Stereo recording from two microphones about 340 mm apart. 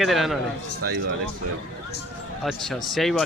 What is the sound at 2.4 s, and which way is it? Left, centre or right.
Speech, centre.